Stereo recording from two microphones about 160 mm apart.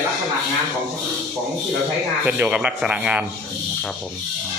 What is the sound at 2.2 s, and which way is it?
Speech, 5° right (ahead or behind).